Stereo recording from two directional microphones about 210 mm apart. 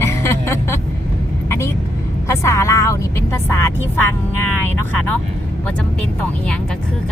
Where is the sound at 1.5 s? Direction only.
15° left (ahead or behind).